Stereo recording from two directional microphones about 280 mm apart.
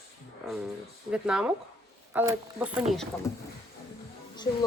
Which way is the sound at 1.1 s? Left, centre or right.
Centre.